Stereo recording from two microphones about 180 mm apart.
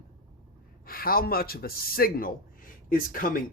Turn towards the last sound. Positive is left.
turn(degrees=50)  # may be behind; listen again after turning